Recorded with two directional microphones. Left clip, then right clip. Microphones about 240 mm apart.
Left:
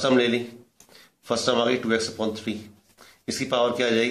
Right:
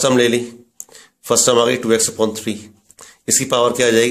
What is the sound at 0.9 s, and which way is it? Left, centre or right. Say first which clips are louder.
Speech: right 10 dB; right.